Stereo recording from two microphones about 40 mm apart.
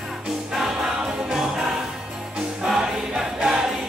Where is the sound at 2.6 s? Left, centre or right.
Centre.